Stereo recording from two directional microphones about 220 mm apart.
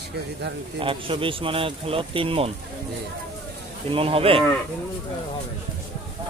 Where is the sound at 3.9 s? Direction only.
25° right (ahead or behind).